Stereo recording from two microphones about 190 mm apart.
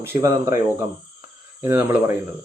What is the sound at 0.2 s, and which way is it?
Speech, 15° right (ahead or behind).